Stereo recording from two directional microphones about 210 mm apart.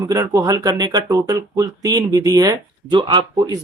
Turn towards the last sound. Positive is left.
turn(degrees=-20)  # may be behind; listen again after turning